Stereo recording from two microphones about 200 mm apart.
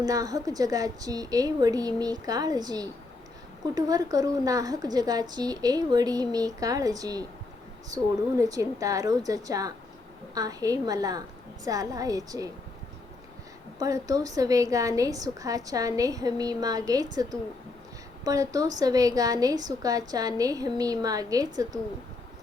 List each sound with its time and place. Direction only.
0.0 s a woman's voice: 20° right (ahead or behind)
13.7 s a woman's voice: 15° right (ahead or behind)
18.3 s a woman's voice: 15° right (ahead or behind)